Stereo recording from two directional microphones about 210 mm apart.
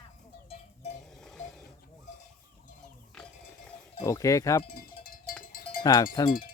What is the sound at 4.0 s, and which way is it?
Cowbell, 15° left (ahead or behind).